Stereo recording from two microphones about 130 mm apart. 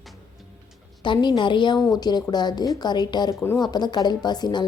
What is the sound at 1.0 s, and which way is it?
Speech, 35° left (ahead or behind).